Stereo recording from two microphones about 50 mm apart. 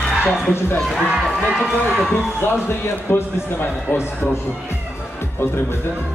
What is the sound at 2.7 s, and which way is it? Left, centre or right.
A man's voice, left.